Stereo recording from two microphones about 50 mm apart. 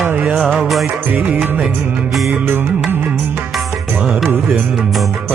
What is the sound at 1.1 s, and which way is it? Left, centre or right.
Music, right.